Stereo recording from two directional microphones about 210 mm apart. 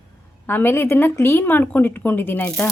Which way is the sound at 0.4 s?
10° left (ahead or behind).